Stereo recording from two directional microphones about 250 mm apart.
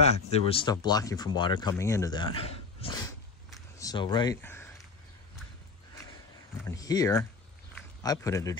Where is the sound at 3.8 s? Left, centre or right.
Centre.